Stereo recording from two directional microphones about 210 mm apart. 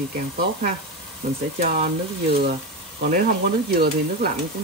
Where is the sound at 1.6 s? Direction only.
40° right (ahead or behind).